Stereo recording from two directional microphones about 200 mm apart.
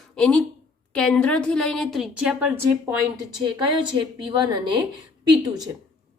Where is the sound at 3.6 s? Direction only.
20° right (ahead or behind).